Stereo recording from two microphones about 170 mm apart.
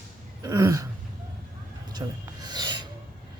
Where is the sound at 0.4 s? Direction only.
20° right (ahead or behind).